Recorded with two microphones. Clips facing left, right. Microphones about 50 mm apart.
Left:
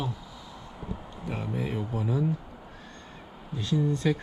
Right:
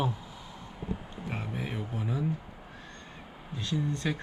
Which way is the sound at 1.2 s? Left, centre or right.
Right.